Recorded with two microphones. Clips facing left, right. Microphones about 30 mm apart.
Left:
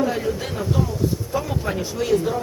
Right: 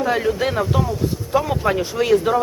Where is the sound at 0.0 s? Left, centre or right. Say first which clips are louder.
Right 4 dB; right.